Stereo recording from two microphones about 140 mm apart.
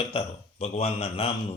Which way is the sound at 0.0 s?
45° left (ahead or behind).